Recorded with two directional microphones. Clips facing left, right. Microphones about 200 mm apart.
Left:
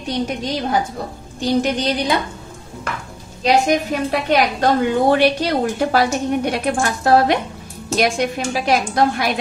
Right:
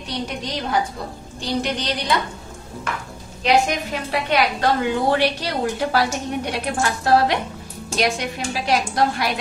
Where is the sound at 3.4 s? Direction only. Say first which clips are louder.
Left 3 dB; 45° left (ahead or behind).